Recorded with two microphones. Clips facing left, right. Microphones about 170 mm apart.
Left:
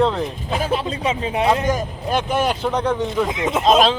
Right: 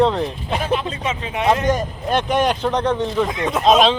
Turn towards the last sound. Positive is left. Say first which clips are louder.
# right 1 dB
turn(degrees=0)  # may be behind; listen again after turning